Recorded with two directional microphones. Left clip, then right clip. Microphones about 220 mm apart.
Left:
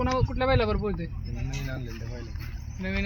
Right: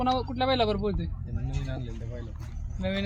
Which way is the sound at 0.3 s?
70° right (ahead or behind).